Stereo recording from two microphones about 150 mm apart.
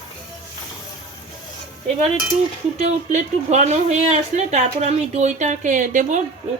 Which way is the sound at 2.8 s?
50° right (ahead or behind).